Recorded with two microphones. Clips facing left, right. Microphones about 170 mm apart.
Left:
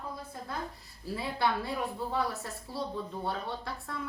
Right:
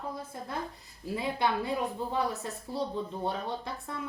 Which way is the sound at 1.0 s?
20° right (ahead or behind).